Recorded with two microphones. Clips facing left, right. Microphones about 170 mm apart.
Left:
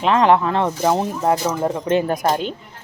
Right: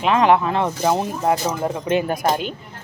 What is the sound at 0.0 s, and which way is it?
Speech, 15° right (ahead or behind).